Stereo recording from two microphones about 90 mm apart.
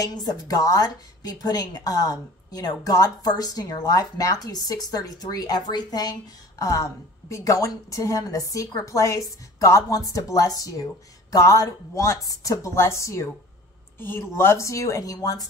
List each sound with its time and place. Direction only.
0.0 s a woman's voice: 45° left (ahead or behind)